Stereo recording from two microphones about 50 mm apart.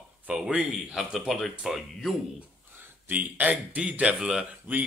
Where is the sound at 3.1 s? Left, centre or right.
Right.